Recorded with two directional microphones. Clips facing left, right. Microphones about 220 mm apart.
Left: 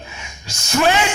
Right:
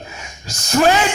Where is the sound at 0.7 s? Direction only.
40° right (ahead or behind).